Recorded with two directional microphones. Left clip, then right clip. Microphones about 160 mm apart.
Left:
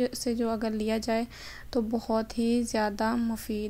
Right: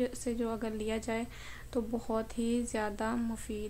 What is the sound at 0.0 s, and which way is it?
A woman's voice, 35° left (ahead or behind).